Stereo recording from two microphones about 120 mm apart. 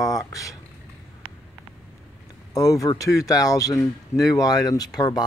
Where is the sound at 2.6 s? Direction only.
30° left (ahead or behind).